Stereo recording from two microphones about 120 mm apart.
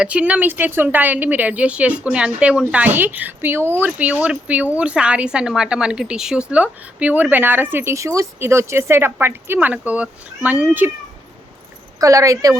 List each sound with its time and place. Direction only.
0.0 s a woman's voice: 10° right (ahead or behind)
11.9 s speech: 30° right (ahead or behind)